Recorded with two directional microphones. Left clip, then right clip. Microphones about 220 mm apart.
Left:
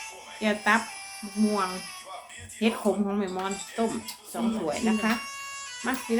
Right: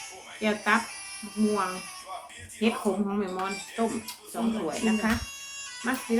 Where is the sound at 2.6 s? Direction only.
25° left (ahead or behind).